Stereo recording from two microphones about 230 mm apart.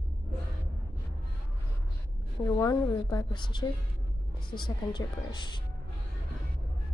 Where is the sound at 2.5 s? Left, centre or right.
Centre.